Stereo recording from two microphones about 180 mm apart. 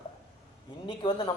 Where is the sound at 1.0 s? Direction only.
25° left (ahead or behind).